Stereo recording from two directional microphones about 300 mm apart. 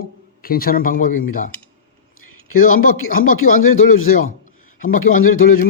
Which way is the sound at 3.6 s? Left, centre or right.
Left.